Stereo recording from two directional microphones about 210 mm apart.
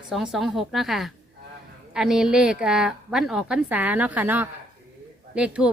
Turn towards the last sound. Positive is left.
turn(degrees=-5)  # may be behind; listen again after turning